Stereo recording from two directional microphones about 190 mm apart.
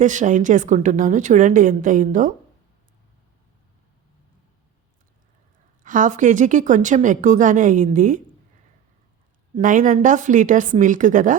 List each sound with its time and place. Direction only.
0.0 s a woman's voice: 40° right (ahead or behind)
5.8 s speech: 45° right (ahead or behind)
9.6 s speech: 45° right (ahead or behind)